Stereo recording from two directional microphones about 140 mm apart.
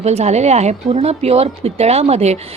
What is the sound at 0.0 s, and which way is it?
A woman's voice, 50° right (ahead or behind).